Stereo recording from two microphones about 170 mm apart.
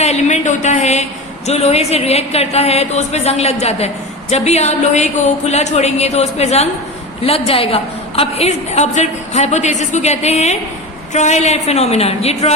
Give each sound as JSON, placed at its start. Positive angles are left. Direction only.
{"t": 0.0, "sound": "a woman's voice", "side_deg": 40}